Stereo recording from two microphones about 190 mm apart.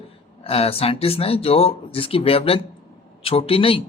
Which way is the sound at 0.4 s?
30° left (ahead or behind).